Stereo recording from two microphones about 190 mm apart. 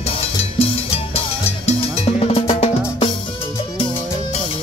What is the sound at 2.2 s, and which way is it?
Drum, 35° left (ahead or behind).